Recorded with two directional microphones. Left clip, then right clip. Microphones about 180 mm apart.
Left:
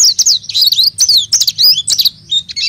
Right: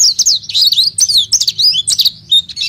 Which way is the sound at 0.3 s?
20° left (ahead or behind).